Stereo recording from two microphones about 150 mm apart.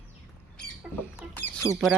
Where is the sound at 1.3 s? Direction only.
15° left (ahead or behind).